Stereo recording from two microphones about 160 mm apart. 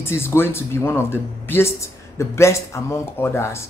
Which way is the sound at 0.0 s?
15° left (ahead or behind).